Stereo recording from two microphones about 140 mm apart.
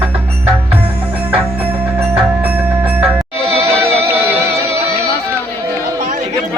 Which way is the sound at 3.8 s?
15° right (ahead or behind).